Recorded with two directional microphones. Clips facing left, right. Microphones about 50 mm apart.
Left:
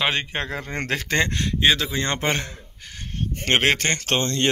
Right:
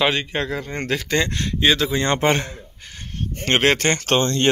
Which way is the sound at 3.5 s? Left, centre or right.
Centre.